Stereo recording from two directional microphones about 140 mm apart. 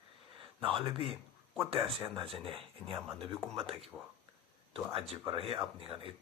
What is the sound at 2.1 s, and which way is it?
Speech, 40° right (ahead or behind).